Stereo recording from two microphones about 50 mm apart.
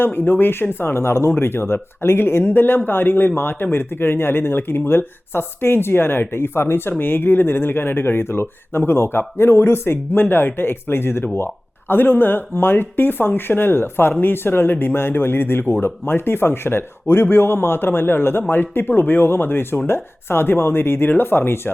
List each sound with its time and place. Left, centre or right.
0.0 s speech: left
2.4 s speech: left